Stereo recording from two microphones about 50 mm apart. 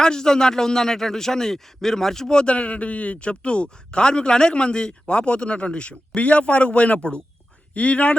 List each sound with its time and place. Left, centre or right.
0.0 s a man's voice: centre